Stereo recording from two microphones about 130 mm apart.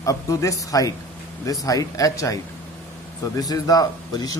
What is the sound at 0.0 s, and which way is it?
Speech, 25° left (ahead or behind).